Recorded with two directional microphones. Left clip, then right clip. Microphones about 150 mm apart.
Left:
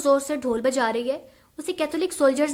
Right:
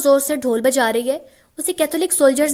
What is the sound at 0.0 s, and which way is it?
A woman's voice, 35° right (ahead or behind).